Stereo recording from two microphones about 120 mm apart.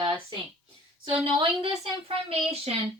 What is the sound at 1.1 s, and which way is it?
Speech, 50° right (ahead or behind).